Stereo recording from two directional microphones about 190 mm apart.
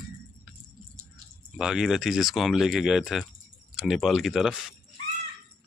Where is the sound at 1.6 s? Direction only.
Centre (ahead or behind).